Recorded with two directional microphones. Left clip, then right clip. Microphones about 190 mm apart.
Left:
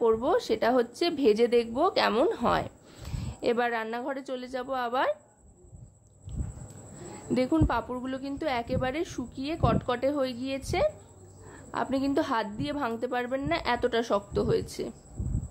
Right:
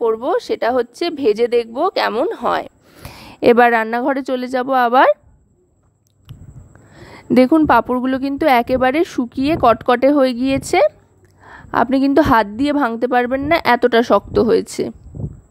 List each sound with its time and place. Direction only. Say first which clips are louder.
0.0 s a woman's voice: right 8 dB; 40° right (ahead or behind)
7.3 s a woman's voice: right 15 dB; 30° right (ahead or behind)
7.6 s a woman's voice: right 16 dB; 45° right (ahead or behind)